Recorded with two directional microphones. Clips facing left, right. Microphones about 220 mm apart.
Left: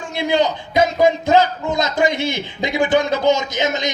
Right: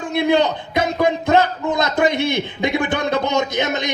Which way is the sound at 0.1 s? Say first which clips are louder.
Right 2 dB; 60° right (ahead or behind).